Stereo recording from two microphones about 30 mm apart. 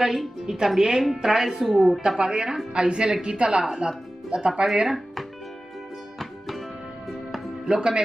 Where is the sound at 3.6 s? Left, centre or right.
Right.